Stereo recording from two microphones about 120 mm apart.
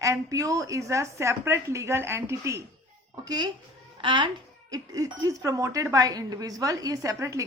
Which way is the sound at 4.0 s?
45° right (ahead or behind).